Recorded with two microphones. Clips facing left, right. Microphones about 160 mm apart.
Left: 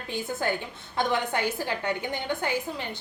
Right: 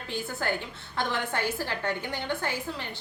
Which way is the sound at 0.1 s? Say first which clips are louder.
Left 2 dB; 15° left (ahead or behind).